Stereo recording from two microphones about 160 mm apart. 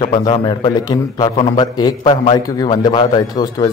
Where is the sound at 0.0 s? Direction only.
30° left (ahead or behind).